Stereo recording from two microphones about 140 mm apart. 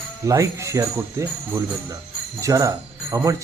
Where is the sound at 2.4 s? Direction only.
25° right (ahead or behind).